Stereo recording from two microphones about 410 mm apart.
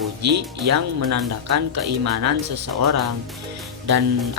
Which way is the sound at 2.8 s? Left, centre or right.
Right.